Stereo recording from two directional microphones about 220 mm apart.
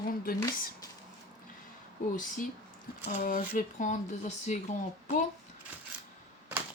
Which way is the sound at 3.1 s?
35° left (ahead or behind).